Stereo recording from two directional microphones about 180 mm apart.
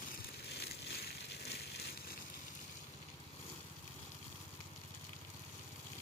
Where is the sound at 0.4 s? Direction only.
65° left (ahead or behind).